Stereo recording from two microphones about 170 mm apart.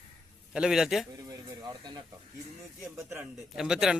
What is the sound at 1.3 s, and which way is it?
Snake, 25° right (ahead or behind).